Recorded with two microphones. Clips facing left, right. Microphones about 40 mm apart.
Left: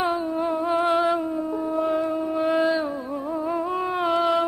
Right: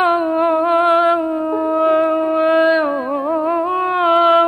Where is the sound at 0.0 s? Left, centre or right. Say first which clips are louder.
Right 9 dB; right.